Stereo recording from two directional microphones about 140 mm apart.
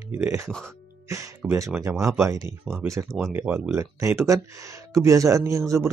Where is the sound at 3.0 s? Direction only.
Centre (ahead or behind).